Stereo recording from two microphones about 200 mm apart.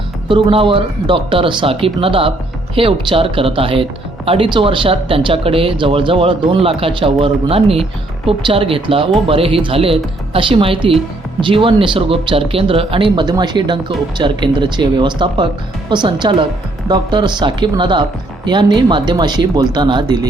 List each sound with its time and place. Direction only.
0.3 s speech: 25° right (ahead or behind)